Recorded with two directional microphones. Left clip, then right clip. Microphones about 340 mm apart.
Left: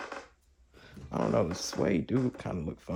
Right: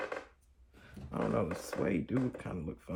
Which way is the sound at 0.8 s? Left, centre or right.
Left.